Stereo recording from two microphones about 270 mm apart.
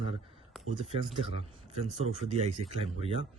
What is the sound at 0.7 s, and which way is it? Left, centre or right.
Speech, right.